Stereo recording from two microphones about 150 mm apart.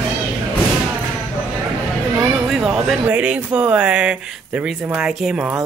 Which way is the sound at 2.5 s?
Centre (ahead or behind).